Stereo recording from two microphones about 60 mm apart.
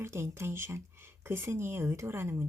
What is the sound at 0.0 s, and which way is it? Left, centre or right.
Speech, right.